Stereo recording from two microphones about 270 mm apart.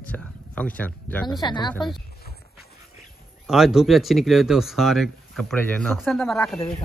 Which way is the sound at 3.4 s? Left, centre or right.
Centre.